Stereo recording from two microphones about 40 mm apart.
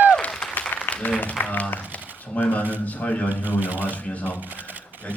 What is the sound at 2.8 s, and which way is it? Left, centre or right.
Speech, left.